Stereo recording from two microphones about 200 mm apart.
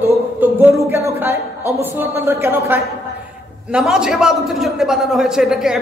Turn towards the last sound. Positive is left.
turn(degrees=0)  # may be behind; listen again after turning